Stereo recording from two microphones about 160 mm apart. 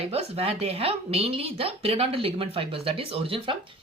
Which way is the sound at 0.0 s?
40° right (ahead or behind).